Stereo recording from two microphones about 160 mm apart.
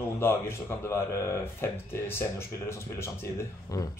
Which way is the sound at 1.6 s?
15° left (ahead or behind).